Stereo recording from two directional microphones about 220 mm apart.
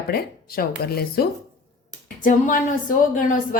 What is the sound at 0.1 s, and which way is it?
Speech, 45° left (ahead or behind).